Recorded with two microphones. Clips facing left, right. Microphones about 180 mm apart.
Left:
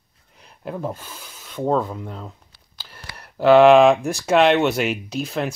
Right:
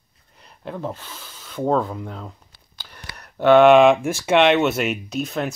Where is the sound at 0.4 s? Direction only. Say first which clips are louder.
Left 1 dB; 5° left (ahead or behind).